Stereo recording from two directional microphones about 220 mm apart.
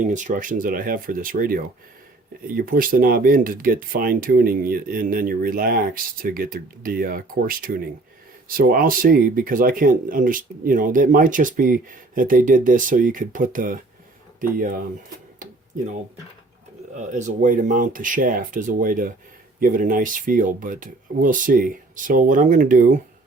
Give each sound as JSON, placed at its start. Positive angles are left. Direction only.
{"t": 0.1, "sound": "speech", "side_deg": -35}
{"t": 16.9, "sound": "speech", "side_deg": -35}